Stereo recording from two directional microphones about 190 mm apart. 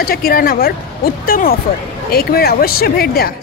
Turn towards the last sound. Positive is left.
turn(degrees=55)  # may be behind; listen again after turning